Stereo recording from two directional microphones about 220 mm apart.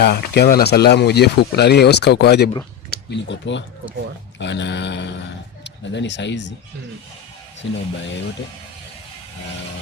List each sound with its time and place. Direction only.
0.0 s speech: 45° left (ahead or behind)